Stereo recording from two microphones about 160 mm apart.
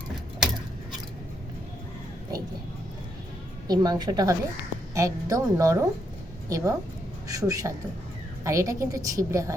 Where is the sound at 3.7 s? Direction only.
25° right (ahead or behind).